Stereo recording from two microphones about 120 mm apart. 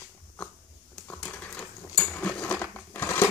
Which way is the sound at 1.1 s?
10° left (ahead or behind).